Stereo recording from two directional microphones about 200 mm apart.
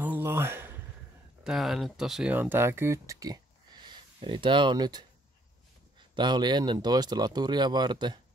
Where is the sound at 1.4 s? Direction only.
Centre (ahead or behind).